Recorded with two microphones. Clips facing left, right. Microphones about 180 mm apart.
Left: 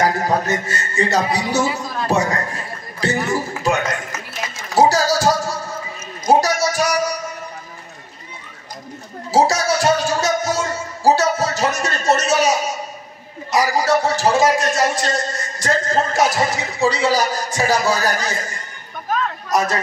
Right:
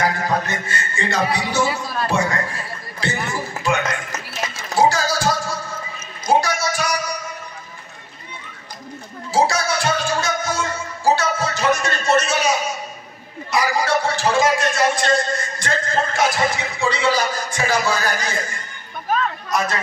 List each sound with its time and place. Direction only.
0.0 s a man's voice: 40° left (ahead or behind)
4.7 s music: 40° left (ahead or behind)
6.2 s a sound: 40° left (ahead or behind)
9.3 s music: 40° left (ahead or behind)
13.5 s a man's voice: 40° left (ahead or behind)